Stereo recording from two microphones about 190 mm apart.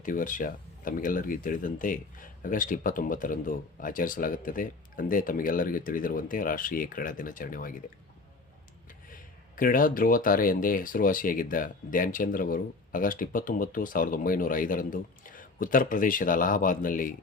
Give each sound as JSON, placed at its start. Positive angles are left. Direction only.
{"t": 0.0, "sound": "speech", "side_deg": 45}
{"t": 9.0, "sound": "speech", "side_deg": 45}